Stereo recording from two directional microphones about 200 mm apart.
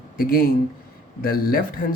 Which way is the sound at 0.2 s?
45° left (ahead or behind).